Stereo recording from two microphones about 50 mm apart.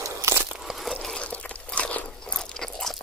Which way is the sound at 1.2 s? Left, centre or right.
Left.